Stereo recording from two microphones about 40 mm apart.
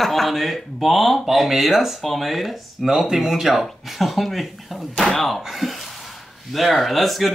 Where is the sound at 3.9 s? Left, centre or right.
Centre.